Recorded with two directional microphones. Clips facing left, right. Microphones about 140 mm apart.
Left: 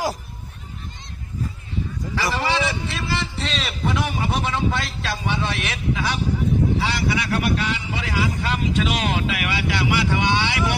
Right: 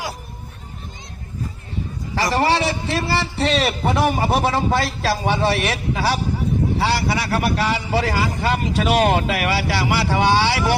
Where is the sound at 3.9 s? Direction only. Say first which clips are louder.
Right 7 dB; 40° right (ahead or behind).